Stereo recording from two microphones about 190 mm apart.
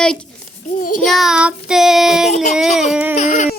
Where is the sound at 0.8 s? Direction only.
45° left (ahead or behind).